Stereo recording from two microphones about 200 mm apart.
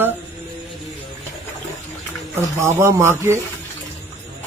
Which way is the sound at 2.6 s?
10° right (ahead or behind).